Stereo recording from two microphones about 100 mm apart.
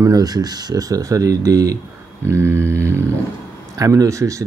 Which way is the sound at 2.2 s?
25° right (ahead or behind).